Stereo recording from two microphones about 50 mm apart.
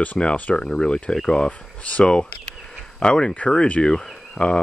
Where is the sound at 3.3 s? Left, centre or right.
Left.